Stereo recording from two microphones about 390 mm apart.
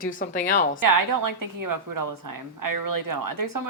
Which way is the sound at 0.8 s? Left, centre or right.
Right.